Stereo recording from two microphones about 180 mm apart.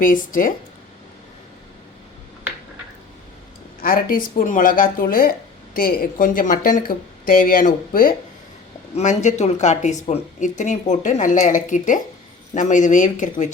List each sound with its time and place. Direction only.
0.0 s speech: 50° left (ahead or behind)
3.8 s speech: 50° left (ahead or behind)
9.0 s speech: 40° left (ahead or behind)